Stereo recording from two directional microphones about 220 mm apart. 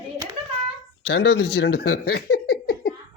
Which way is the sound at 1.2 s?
50° left (ahead or behind).